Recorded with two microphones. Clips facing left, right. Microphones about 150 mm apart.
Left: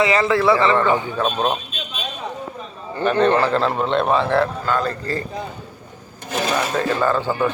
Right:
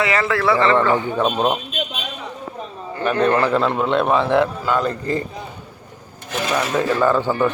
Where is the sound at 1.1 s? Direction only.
15° right (ahead or behind).